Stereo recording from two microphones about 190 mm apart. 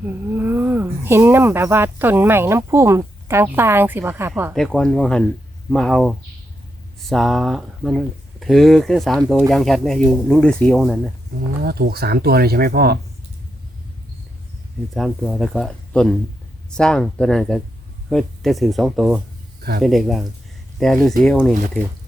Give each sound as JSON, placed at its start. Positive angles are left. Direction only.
{"t": 0.3, "sound": "speech", "side_deg": -10}
{"t": 4.5, "sound": "speech", "side_deg": 5}
{"t": 11.6, "sound": "speech", "side_deg": -55}
{"t": 14.9, "sound": "speech", "side_deg": 0}